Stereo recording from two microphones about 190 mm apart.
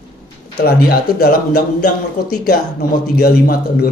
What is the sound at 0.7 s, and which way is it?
Speech, 55° left (ahead or behind).